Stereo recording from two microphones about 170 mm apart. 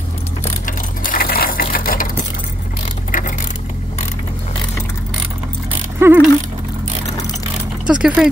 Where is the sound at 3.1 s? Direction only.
55° left (ahead or behind).